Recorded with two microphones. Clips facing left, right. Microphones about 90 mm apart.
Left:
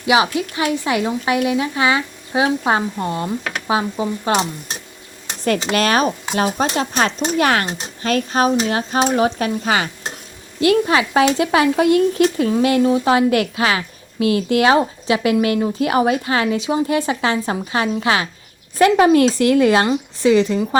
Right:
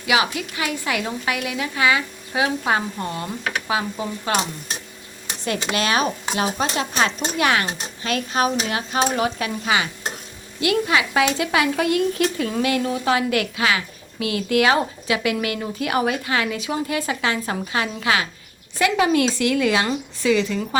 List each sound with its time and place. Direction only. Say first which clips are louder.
0.0 s speech: left 5 dB; 25° left (ahead or behind)
5.5 s a woman's voice: left 5 dB; 45° left (ahead or behind)